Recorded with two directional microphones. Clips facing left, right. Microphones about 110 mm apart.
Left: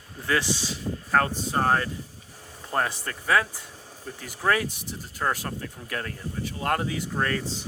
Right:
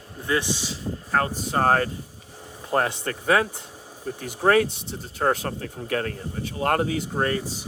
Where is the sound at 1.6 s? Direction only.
45° right (ahead or behind).